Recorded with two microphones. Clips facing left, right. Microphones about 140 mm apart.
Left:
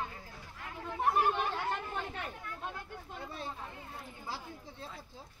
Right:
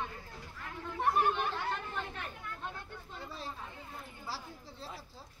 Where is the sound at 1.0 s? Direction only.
5° left (ahead or behind).